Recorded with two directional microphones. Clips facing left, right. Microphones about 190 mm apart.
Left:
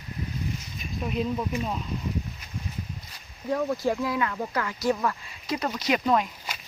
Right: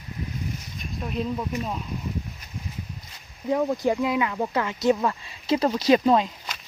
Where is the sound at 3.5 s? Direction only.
15° right (ahead or behind).